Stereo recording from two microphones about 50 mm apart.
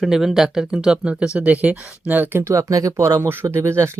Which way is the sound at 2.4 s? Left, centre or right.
Right.